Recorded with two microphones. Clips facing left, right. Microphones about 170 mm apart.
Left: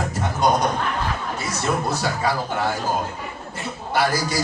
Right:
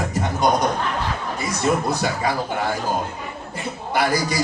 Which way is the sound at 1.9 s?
15° right (ahead or behind).